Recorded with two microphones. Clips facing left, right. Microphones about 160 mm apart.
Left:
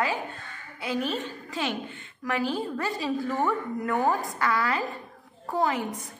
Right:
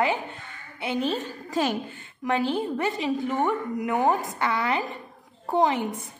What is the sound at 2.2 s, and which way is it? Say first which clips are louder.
A woman's voice: right 3 dB; 25° right (ahead or behind).